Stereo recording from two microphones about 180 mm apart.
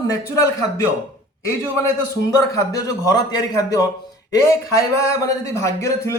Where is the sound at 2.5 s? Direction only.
20° left (ahead or behind).